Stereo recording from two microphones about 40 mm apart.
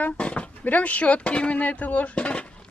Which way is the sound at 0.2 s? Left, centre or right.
Left.